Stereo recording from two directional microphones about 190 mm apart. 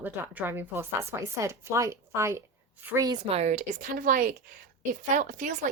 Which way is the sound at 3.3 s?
35° right (ahead or behind).